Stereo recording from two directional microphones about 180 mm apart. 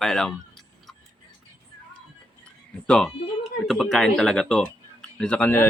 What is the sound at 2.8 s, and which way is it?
Speech, 5° left (ahead or behind).